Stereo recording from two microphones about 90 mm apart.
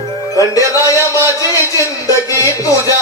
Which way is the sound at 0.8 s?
40° left (ahead or behind).